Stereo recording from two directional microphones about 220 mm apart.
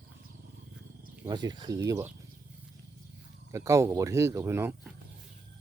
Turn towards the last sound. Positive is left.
turn(degrees=-10)  # may be behind; listen again after turning